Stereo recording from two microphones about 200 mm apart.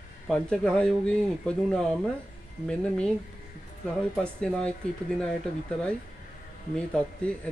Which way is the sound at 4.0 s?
5° left (ahead or behind).